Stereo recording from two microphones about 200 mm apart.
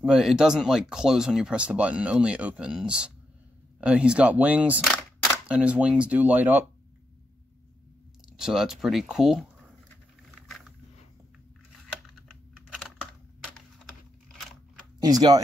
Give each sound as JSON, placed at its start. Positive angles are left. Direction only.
{"t": 0.0, "sound": "speech", "side_deg": 0}
{"t": 8.4, "sound": "speech", "side_deg": 0}
{"t": 12.3, "sound": "computer keyboard", "side_deg": 0}
{"t": 14.4, "sound": "a sound", "side_deg": 0}
{"t": 15.0, "sound": "speech", "side_deg": -20}